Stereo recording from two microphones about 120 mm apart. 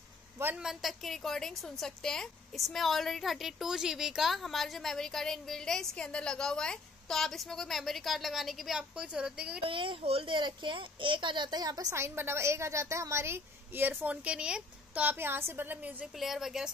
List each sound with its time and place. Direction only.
0.6 s a woman's voice: centre (ahead or behind)
9.6 s a child's voice: 45° right (ahead or behind); by 16.1 s 15° right (ahead or behind)
16.2 s a woman's voice: centre (ahead or behind)